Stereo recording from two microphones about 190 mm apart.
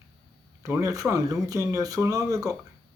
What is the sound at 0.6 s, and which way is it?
Speech, 15° right (ahead or behind).